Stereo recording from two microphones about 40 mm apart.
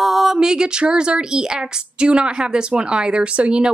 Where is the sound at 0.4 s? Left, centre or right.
Centre.